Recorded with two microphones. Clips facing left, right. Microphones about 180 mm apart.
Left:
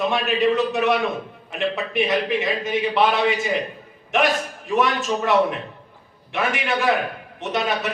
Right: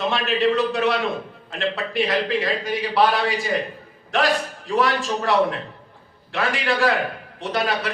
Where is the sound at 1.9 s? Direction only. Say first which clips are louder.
Left 1 dB; 20° left (ahead or behind).